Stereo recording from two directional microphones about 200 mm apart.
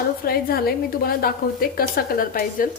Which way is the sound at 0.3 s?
50° left (ahead or behind).